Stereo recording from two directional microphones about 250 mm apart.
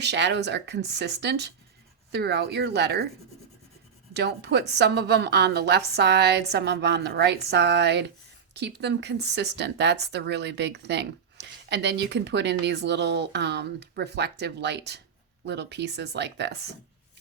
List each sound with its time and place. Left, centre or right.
0.0 s a woman's voice: right
4.1 s a woman's voice: right